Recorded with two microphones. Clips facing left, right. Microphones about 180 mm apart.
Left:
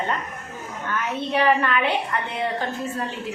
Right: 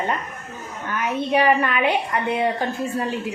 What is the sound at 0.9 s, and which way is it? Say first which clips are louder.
A woman's voice: right 4 dB; 15° right (ahead or behind).